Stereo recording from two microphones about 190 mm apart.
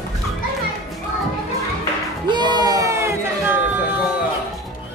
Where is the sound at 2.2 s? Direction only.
25° right (ahead or behind).